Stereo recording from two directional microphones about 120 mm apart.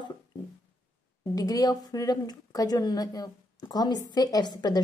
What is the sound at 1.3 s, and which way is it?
Speech, 30° left (ahead or behind).